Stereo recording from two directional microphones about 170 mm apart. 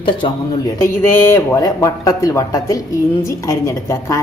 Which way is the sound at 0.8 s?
15° left (ahead or behind).